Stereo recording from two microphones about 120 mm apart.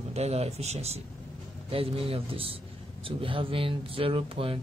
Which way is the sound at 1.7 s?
50° right (ahead or behind).